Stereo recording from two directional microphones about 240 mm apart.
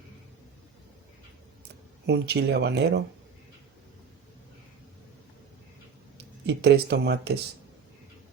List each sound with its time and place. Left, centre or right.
2.0 s speech: right
6.4 s speech: right